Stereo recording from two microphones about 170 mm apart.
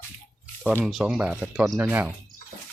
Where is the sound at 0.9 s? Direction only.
5° right (ahead or behind).